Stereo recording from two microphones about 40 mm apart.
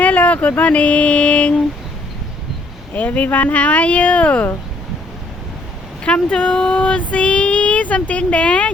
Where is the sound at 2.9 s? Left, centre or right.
Left.